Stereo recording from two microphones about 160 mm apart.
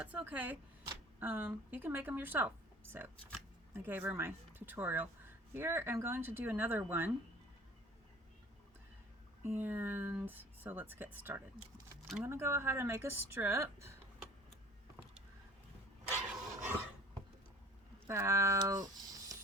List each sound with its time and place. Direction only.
0.0 s speech: 10° right (ahead or behind)
3.8 s speech: 15° right (ahead or behind)
9.4 s speech: 15° right (ahead or behind)
16.2 s dog: 5° right (ahead or behind)
18.1 s a sound: 20° right (ahead or behind)